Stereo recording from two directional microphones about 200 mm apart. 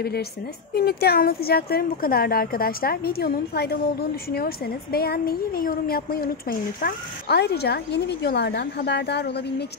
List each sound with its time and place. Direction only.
0.0 s speech: 55° left (ahead or behind)